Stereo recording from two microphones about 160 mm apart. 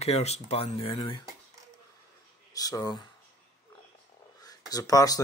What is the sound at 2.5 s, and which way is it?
Speech, 25° left (ahead or behind).